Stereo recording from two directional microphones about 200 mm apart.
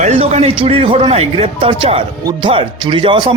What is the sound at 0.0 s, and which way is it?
A man's voice, 35° right (ahead or behind).